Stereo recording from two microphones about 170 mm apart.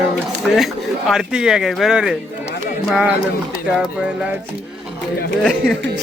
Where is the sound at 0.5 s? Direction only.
Centre (ahead or behind).